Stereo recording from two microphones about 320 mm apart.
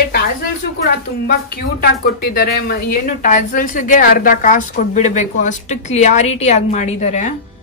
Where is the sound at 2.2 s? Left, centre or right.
Left.